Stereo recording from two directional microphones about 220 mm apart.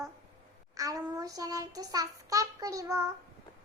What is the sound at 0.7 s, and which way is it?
A child's voice, 15° right (ahead or behind).